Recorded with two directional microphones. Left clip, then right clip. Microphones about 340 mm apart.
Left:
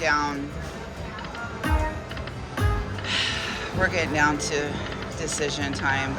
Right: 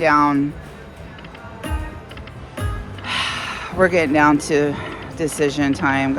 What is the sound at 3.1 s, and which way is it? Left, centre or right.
Speech, centre.